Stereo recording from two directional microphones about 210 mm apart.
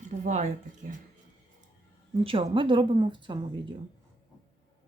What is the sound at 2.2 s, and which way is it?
Speech, 25° right (ahead or behind).